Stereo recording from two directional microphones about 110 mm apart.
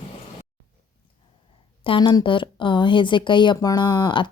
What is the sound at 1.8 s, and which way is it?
A woman's voice, 50° left (ahead or behind).